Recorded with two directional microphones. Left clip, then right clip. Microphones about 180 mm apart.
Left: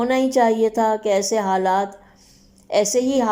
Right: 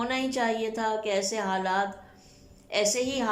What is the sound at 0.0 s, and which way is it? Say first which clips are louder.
A woman's voice: left 11 dB; 35° left (ahead or behind).